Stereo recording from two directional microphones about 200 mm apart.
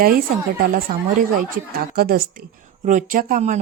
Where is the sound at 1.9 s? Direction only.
50° right (ahead or behind).